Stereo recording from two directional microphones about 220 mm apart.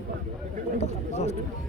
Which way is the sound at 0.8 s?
30° left (ahead or behind).